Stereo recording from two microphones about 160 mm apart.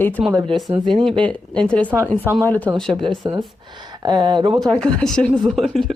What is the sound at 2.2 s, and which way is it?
Speech, 15° right (ahead or behind).